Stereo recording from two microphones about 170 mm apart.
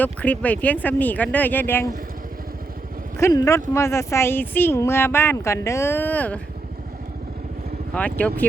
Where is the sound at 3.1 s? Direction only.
20° left (ahead or behind).